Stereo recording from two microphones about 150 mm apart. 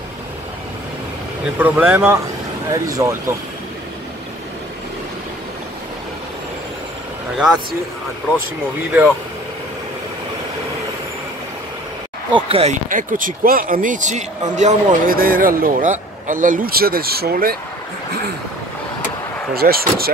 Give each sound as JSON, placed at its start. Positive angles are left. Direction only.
{"t": 1.6, "sound": "speech", "side_deg": -15}
{"t": 7.3, "sound": "speech", "side_deg": -5}
{"t": 12.4, "sound": "speech", "side_deg": -40}
{"t": 12.7, "sound": "speech", "side_deg": -60}
{"t": 19.5, "sound": "speech", "side_deg": -85}